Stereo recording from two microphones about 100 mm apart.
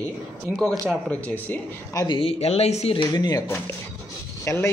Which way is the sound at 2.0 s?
65° left (ahead or behind).